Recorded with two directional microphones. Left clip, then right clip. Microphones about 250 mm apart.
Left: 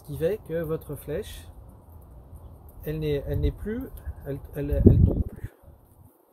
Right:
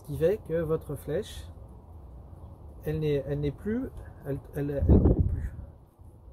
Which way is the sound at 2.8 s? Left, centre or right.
Centre.